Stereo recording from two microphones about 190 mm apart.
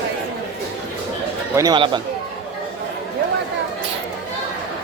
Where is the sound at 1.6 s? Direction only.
20° right (ahead or behind).